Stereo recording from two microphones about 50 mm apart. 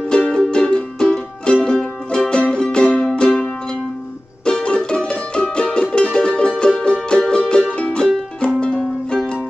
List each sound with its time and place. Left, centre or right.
0.2 s music: centre
4.5 s music: centre
9.1 s music: centre